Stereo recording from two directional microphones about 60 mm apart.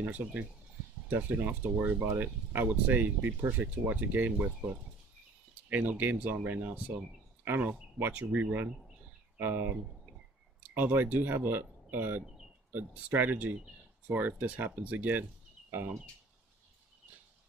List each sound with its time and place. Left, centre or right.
0.0 s speech: right
5.5 s speech: right
8.1 s speech: right
9.4 s speech: right